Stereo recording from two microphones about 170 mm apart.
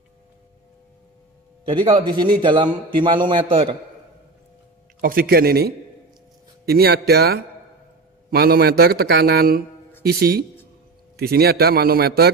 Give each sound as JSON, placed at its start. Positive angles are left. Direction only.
{"t": 1.7, "sound": "a man's voice", "side_deg": -30}
{"t": 5.0, "sound": "a man's voice", "side_deg": -60}